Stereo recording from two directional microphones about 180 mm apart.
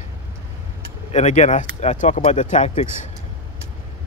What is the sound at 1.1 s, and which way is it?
Speech, 40° left (ahead or behind).